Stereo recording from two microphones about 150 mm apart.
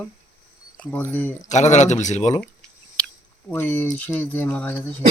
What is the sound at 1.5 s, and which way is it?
Speech, 50° left (ahead or behind).